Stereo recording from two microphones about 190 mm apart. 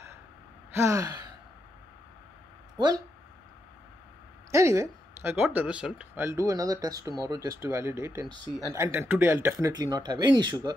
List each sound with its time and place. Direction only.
0.7 s speech: 15° right (ahead or behind)
4.5 s speech: 15° right (ahead or behind)